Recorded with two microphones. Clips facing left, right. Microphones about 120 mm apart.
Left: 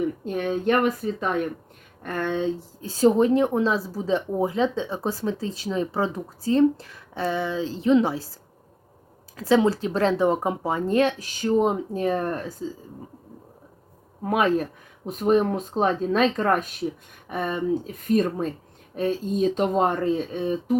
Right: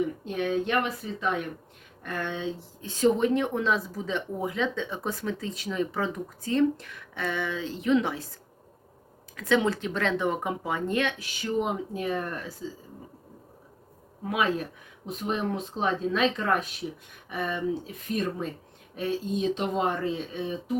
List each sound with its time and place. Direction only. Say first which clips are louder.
0.3 s a woman's voice: left 6 dB; 45° left (ahead or behind)
9.3 s a woman's voice: left 5 dB; 35° left (ahead or behind)
14.3 s speech: left 6 dB; 45° left (ahead or behind)